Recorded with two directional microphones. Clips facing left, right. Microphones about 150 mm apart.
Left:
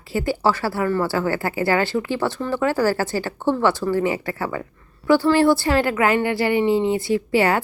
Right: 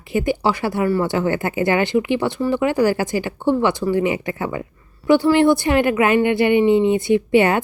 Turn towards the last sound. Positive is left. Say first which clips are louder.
# right 4 dB
turn(degrees=-20)  # may be behind; listen again after turning